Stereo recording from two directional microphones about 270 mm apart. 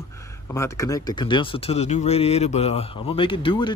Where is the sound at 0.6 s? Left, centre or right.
Centre.